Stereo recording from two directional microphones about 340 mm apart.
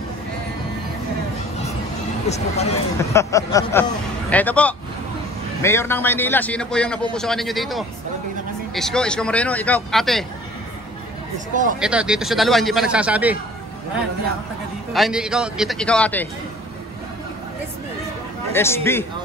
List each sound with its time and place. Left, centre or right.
2.2 s speech: centre
3.0 s a man's voice: centre
11.3 s speech: right
11.8 s a man's voice: centre
14.9 s a man's voice: centre
18.5 s a man's voice: centre